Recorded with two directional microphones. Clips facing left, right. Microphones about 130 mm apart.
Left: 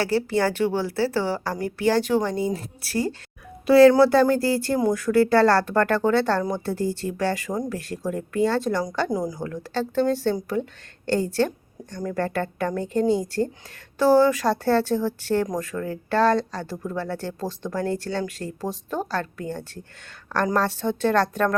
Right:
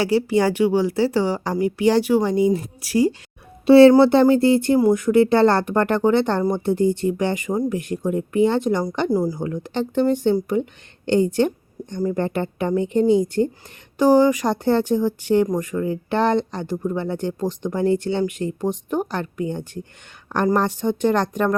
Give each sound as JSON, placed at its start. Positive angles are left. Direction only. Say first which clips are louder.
{"t": 0.0, "sound": "speech", "louder": "right 4 dB", "side_deg": -15}
{"t": 3.7, "sound": "speech", "louder": "right 4 dB", "side_deg": -25}